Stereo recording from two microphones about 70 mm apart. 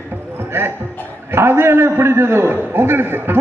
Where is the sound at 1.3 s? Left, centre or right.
Right.